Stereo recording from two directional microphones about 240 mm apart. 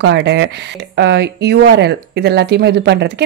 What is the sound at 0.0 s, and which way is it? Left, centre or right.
Speech, right.